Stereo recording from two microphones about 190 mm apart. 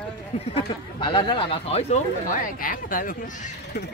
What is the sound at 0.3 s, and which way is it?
Speech, 30° left (ahead or behind).